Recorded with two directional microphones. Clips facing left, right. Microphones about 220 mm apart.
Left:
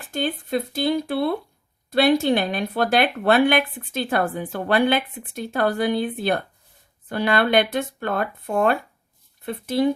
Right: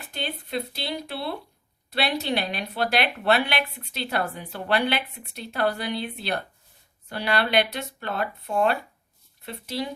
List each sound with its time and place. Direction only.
0.0 s speech: 50° left (ahead or behind)